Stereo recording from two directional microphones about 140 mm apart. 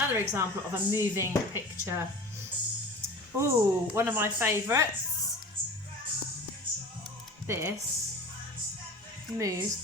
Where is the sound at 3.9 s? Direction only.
15° right (ahead or behind).